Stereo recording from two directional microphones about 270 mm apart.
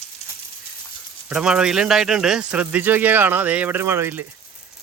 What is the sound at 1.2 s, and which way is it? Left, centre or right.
Speech, centre.